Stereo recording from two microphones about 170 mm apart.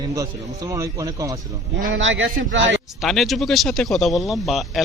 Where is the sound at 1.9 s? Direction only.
90° right.